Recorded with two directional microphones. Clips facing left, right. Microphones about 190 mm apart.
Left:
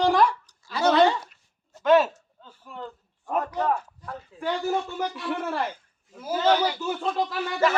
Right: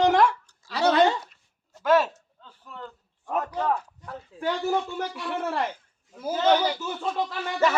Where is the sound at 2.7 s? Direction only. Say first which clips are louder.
Left 3 dB; 10° left (ahead or behind).